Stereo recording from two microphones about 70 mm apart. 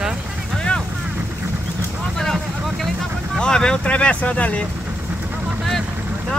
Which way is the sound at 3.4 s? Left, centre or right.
Centre.